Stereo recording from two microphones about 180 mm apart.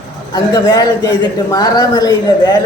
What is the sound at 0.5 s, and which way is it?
A man's voice, 20° left (ahead or behind).